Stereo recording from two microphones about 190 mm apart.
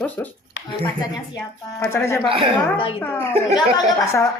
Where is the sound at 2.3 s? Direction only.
30° right (ahead or behind).